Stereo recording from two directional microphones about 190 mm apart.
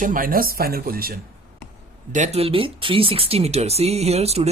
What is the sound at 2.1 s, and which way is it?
Speech, 35° right (ahead or behind).